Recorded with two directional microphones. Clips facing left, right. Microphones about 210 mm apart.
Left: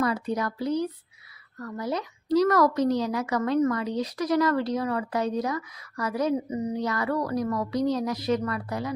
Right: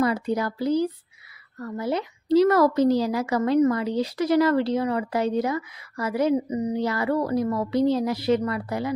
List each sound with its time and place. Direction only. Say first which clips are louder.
0.0 s a woman's voice: right 3 dB; 30° right (ahead or behind)
6.7 s a woman's voice: right 3 dB; 30° right (ahead or behind)